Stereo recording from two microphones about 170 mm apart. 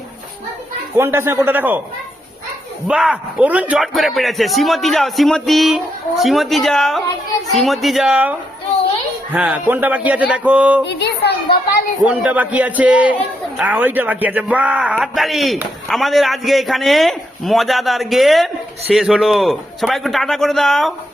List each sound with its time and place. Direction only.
0.9 s a man's voice: 15° right (ahead or behind)
2.8 s a man's voice: 5° right (ahead or behind)
10.8 s a woman's voice: 80° left
12.0 s a man's voice: 10° right (ahead or behind)